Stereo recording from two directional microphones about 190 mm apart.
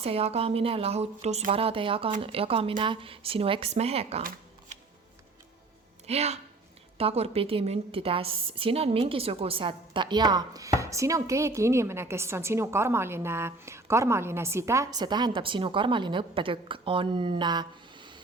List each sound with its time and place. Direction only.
0.0 s a woman's voice: 30° right (ahead or behind)
6.1 s a woman's voice: 35° right (ahead or behind)